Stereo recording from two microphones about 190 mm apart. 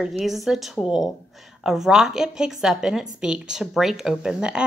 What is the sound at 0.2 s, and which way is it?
A woman's voice, centre (ahead or behind).